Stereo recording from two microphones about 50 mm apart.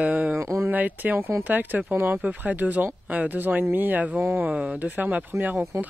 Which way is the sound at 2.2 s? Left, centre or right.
Right.